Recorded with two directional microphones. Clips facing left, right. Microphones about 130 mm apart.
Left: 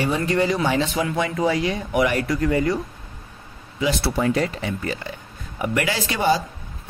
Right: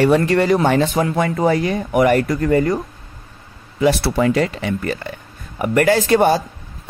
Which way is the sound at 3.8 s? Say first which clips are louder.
Right 6 dB; 75° right (ahead or behind).